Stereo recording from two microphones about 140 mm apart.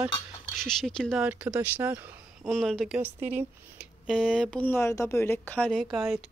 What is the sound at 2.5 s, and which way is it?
Speech, 5° left (ahead or behind).